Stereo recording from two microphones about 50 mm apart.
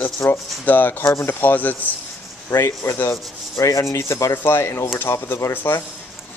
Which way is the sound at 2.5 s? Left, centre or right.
Left.